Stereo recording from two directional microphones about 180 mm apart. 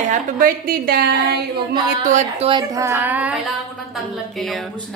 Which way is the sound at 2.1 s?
40° right (ahead or behind).